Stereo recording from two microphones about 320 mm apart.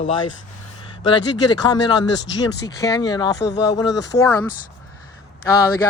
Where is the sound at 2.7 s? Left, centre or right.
Centre.